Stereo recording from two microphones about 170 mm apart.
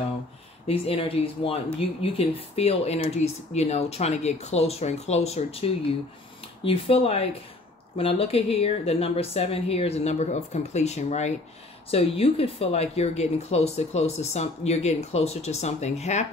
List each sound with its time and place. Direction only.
0.7 s speech: 35° left (ahead or behind)